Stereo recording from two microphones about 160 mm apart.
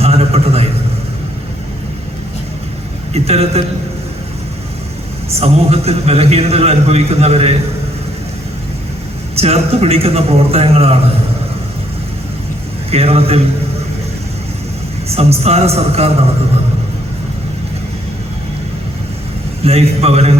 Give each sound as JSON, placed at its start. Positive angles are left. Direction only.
{"t": 0.0, "sound": "a sound", "side_deg": -40}
{"t": 3.1, "sound": "a man's voice", "side_deg": -40}
{"t": 5.4, "sound": "a man's voice", "side_deg": -40}
{"t": 9.3, "sound": "a man's voice", "side_deg": -40}
{"t": 12.9, "sound": "a man's voice", "side_deg": -40}
{"t": 15.1, "sound": "a man's voice", "side_deg": -40}
{"t": 19.6, "sound": "a man's voice", "side_deg": -40}